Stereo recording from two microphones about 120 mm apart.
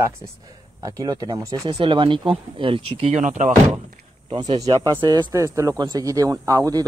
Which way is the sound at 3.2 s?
90° right.